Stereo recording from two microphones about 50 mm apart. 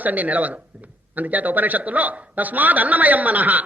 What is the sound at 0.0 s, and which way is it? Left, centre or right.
A man's voice, right.